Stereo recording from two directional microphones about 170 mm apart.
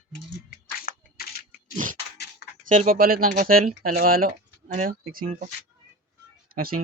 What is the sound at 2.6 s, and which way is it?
Speech, 50° right (ahead or behind).